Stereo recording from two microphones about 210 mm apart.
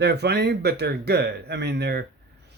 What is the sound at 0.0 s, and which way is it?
Speech, 50° right (ahead or behind).